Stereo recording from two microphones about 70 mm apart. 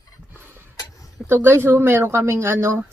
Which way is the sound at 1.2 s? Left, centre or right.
Right.